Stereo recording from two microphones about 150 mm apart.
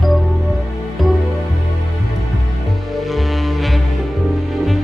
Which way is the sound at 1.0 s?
Centre (ahead or behind).